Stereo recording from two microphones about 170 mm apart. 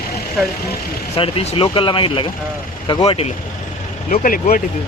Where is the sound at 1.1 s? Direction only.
35° left (ahead or behind).